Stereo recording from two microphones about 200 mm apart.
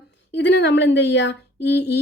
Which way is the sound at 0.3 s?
60° left (ahead or behind).